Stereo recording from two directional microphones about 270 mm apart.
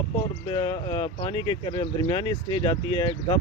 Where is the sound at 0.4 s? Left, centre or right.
Centre.